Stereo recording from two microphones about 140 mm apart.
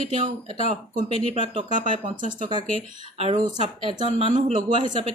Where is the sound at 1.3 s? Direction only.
60° right (ahead or behind).